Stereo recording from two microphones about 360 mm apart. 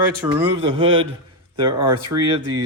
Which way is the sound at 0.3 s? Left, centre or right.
Centre.